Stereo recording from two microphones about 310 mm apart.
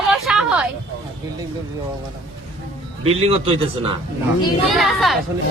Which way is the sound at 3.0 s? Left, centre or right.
Centre.